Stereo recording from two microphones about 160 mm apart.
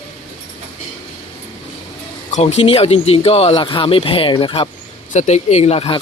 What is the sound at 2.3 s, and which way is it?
Speech, 40° left (ahead or behind).